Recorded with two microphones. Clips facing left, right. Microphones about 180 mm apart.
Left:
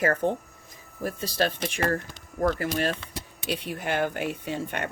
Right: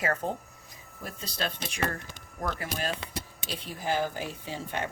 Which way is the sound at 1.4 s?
55° left (ahead or behind).